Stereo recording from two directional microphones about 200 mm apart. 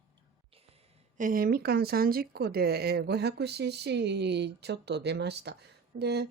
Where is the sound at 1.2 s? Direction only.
45° right (ahead or behind).